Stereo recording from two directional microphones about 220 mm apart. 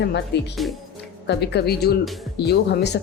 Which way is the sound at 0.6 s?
Centre (ahead or behind).